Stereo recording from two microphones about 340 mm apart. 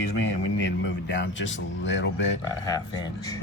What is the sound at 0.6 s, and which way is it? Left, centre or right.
Speech, left.